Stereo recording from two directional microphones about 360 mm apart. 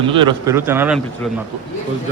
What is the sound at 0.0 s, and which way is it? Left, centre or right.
A man's voice, centre.